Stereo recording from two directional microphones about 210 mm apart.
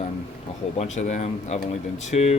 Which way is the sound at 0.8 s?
35° left (ahead or behind).